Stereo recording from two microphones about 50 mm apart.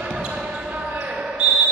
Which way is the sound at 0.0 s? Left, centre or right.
Right.